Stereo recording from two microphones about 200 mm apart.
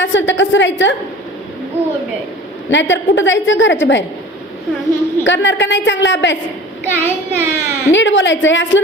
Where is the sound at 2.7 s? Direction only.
65° left (ahead or behind).